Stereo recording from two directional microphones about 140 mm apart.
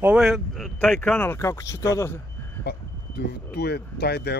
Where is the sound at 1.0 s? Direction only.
15° left (ahead or behind).